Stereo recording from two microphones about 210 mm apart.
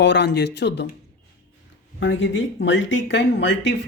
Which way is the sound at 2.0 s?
60° left (ahead or behind).